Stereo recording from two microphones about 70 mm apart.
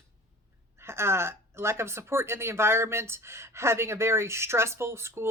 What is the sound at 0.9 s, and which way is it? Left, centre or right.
Speech, right.